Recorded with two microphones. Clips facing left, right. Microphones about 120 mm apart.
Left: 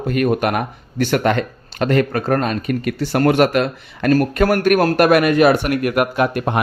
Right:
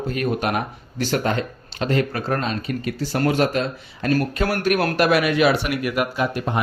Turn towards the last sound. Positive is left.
turn(degrees=60)  # may be behind; listen again after turning